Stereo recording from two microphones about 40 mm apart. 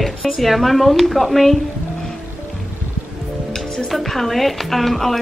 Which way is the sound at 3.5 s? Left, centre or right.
Centre.